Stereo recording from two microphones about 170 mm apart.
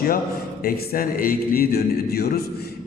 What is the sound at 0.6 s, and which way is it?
Music, 60° left (ahead or behind).